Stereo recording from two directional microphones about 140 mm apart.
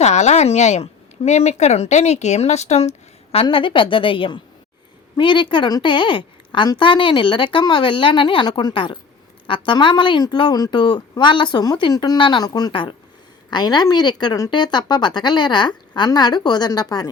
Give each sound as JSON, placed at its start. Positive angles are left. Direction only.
{"t": 0.0, "sound": "speech", "side_deg": 55}
{"t": 3.3, "sound": "a woman's voice", "side_deg": 40}